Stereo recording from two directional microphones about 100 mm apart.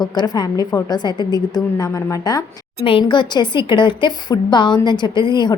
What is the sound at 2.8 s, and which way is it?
Speech, 55° left (ahead or behind).